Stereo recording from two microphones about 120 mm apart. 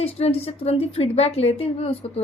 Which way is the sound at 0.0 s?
55° left (ahead or behind).